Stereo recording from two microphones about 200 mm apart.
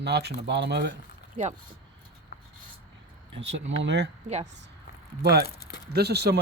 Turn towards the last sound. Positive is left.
turn(degrees=-55)  # may be behind; listen again after turning